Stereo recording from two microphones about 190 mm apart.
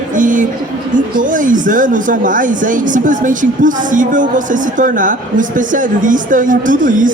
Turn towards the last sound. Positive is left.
turn(degrees=-45)  # may be behind; listen again after turning